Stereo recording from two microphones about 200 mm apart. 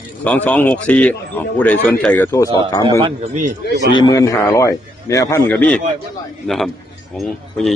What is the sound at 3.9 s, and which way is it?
A man's voice, 20° left (ahead or behind).